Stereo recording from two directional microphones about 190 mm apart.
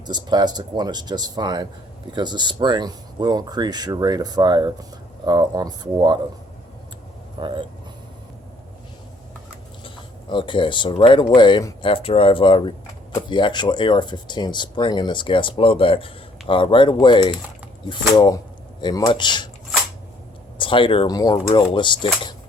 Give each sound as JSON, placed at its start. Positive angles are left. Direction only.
{"t": 0.1, "sound": "speech", "side_deg": -20}
{"t": 7.3, "sound": "speech", "side_deg": -25}
{"t": 9.8, "sound": "speech", "side_deg": 25}
{"t": 20.6, "sound": "speech", "side_deg": 25}